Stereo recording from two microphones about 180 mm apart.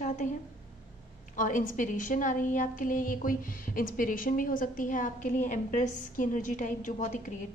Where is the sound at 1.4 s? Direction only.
45° left (ahead or behind).